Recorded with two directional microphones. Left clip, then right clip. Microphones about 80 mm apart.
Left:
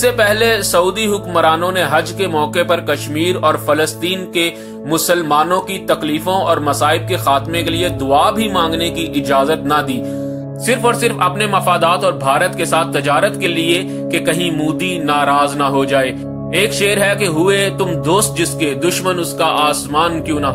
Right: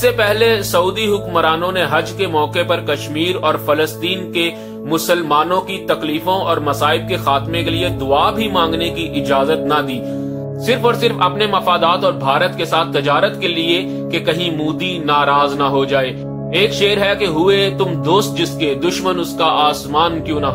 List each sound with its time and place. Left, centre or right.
0.0 s speech: left